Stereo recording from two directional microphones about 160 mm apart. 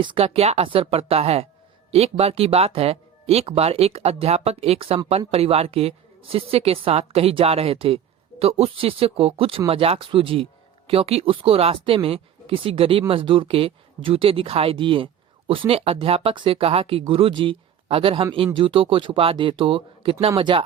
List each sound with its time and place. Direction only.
0.0 s a woman's voice: 35° right (ahead or behind)